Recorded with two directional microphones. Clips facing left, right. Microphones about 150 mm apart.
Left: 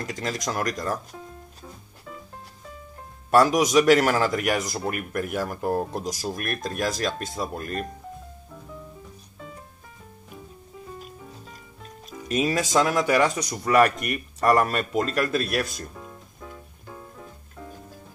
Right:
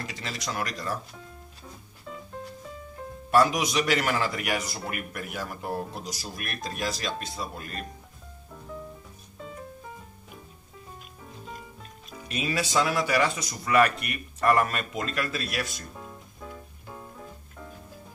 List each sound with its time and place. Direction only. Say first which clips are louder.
0.0 s a man's voice: left 6 dB; 45° left (ahead or behind)
3.3 s a man's voice: left 4 dB; 45° left (ahead or behind)
12.3 s speech: left 6 dB; 40° left (ahead or behind)